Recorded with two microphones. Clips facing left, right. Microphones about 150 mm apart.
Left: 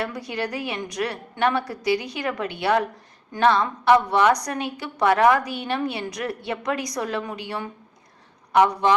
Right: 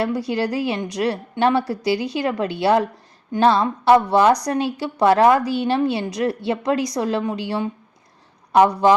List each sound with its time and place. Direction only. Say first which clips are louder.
0.0 s a woman's voice: right 7 dB; 30° right (ahead or behind)